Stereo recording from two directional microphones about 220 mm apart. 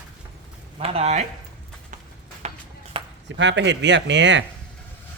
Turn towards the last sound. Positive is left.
turn(degrees=-55)  # may be behind; listen again after turning